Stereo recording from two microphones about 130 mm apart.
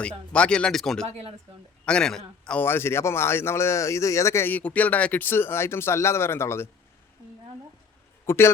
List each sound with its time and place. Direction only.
0.3 s speech: 10° left (ahead or behind)
1.0 s speech: 45° right (ahead or behind)
1.8 s a man's voice: 5° left (ahead or behind)
8.3 s a man's voice: 20° left (ahead or behind)